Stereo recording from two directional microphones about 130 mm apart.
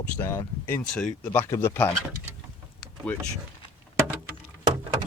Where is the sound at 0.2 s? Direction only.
15° left (ahead or behind).